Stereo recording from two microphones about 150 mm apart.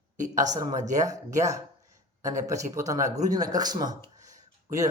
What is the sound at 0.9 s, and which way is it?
Speech, 25° right (ahead or behind).